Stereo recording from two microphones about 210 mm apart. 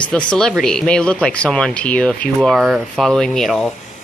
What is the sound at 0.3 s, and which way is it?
A woman's voice, 5° left (ahead or behind).